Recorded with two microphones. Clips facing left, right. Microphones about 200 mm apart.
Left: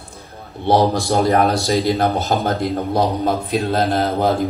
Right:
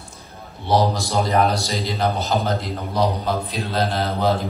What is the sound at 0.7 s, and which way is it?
A man's voice, 55° left (ahead or behind).